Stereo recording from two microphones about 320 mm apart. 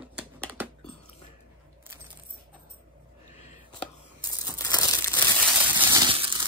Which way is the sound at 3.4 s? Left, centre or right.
Left.